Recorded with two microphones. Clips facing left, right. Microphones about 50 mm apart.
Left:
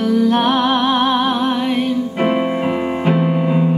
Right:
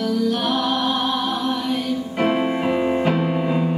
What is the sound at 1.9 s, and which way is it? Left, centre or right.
Music, centre.